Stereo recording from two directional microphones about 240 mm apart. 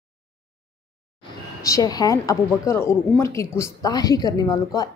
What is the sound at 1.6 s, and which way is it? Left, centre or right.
A woman's voice, centre.